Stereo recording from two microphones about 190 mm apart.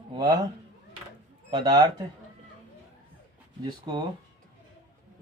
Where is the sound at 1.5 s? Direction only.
20° right (ahead or behind).